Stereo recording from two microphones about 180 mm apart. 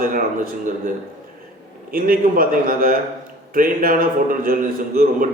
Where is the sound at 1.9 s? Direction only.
55° right (ahead or behind).